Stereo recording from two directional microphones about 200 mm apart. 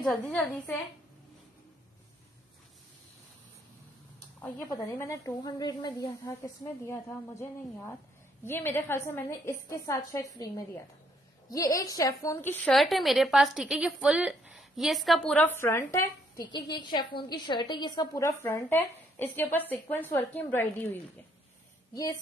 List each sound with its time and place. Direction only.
0.0 s a woman's voice: 5° left (ahead or behind)
4.4 s a woman's voice: 15° left (ahead or behind)
11.5 s a woman's voice: 15° left (ahead or behind)
12.7 s a woman's voice: centre (ahead or behind); by 22.2 s 15° left (ahead or behind)